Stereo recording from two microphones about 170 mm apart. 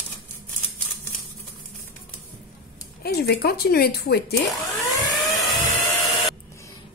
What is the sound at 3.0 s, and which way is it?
Speech, 65° left (ahead or behind).